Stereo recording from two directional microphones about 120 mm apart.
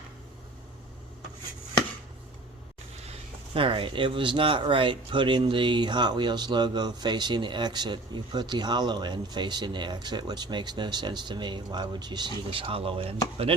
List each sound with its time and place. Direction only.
3.5 s speech: 45° right (ahead or behind)